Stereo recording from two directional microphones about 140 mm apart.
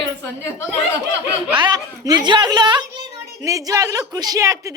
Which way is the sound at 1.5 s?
30° right (ahead or behind).